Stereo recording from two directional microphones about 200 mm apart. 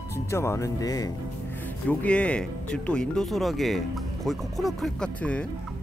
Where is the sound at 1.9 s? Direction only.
5° left (ahead or behind).